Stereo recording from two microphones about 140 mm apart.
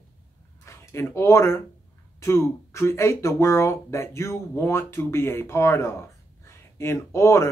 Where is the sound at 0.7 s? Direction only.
20° left (ahead or behind).